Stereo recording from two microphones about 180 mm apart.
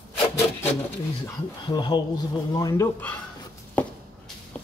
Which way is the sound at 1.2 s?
25° left (ahead or behind).